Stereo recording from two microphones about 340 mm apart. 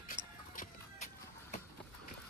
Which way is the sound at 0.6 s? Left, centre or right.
Left.